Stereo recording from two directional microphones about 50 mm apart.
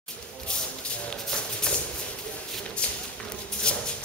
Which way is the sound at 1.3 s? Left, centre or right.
Centre.